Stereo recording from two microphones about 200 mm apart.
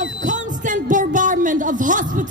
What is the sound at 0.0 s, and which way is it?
Speech, 40° right (ahead or behind).